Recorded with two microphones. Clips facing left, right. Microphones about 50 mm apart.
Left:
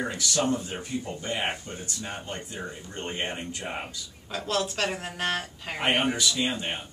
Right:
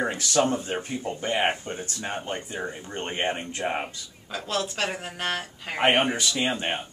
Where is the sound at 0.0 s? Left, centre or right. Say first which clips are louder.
Right 4 dB; right.